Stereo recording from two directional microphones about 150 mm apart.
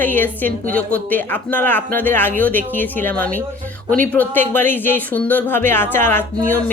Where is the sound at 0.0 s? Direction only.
10° left (ahead or behind).